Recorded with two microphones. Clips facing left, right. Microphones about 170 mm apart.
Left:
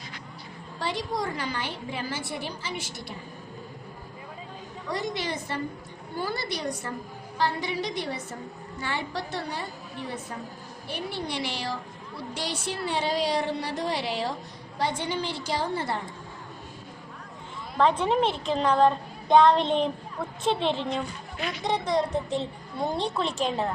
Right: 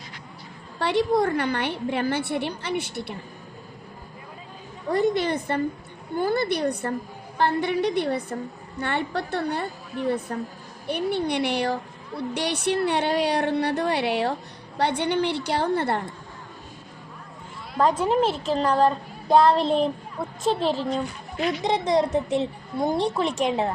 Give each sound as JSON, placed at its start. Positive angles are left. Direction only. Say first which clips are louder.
{"t": 0.8, "sound": "a woman's voice", "louder": "right 9 dB", "side_deg": -65}
{"t": 4.9, "sound": "a woman's voice", "louder": "right 9 dB", "side_deg": -55}
{"t": 17.9, "sound": "a woman's voice", "louder": "right 3 dB", "side_deg": -5}
{"t": 20.4, "sound": "a woman's voice", "louder": "right 3 dB", "side_deg": -40}
{"t": 21.6, "sound": "a child's voice", "louder": "right 3 dB", "side_deg": -20}